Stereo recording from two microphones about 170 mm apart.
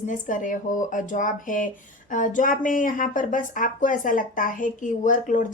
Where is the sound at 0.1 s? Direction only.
50° left (ahead or behind).